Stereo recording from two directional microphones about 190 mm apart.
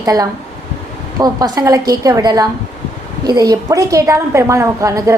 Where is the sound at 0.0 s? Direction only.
20° right (ahead or behind).